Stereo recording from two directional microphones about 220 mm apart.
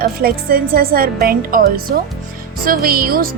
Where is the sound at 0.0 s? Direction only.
40° right (ahead or behind).